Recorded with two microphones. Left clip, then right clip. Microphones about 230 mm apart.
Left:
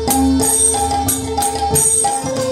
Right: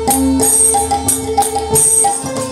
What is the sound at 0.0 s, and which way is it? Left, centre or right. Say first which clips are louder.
Music: right 2 dB; right.